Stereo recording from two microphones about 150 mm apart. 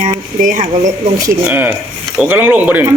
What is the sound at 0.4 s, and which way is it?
Speech, 55° right (ahead or behind).